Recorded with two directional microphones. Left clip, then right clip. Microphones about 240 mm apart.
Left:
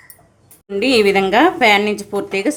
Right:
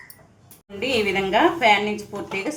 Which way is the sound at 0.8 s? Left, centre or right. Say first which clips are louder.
Left 8 dB; left.